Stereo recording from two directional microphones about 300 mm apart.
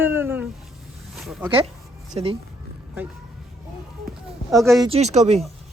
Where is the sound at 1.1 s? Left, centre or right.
Centre.